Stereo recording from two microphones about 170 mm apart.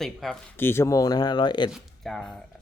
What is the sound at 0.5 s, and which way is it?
Speech, 15° left (ahead or behind).